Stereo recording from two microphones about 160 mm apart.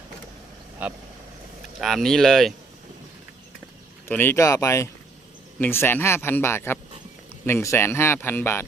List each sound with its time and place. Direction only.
0.8 s speech: 10° right (ahead or behind)
1.8 s speech: centre (ahead or behind)
4.1 s speech: 15° left (ahead or behind)